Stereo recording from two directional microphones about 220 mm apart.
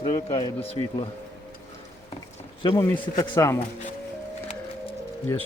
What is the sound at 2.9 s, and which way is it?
Speech, 10° left (ahead or behind).